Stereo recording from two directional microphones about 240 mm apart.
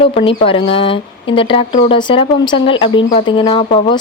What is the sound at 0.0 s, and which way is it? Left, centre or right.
Speech, left.